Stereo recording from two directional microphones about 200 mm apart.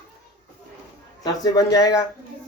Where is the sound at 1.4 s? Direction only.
20° left (ahead or behind).